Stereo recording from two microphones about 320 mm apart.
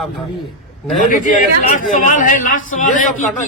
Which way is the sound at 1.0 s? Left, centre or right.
Left.